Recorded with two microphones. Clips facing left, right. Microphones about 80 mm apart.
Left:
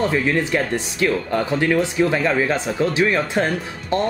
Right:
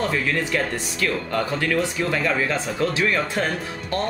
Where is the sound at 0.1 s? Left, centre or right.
Left.